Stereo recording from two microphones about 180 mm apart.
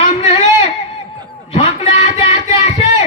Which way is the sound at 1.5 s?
25° left (ahead or behind).